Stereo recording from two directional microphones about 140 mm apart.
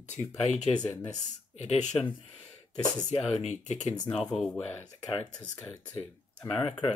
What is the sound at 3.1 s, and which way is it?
Speech, 55° left (ahead or behind).